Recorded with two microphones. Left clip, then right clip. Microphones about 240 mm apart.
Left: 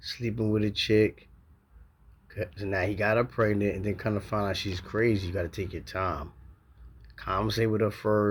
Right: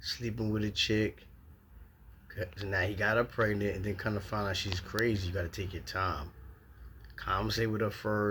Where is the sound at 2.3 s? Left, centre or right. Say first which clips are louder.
Left 4 dB; centre.